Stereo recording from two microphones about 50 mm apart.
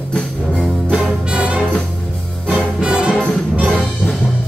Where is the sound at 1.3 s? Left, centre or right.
Right.